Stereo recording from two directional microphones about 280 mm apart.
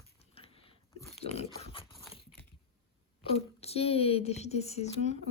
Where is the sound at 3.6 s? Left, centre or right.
Left.